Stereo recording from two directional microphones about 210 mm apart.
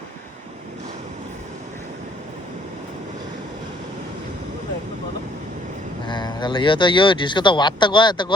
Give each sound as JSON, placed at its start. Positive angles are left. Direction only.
{"t": 6.1, "sound": "speech", "side_deg": 20}